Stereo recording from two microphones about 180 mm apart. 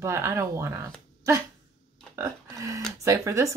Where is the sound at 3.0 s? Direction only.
15° right (ahead or behind).